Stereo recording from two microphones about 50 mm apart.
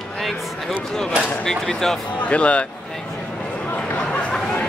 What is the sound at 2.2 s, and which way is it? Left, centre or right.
Speech, left.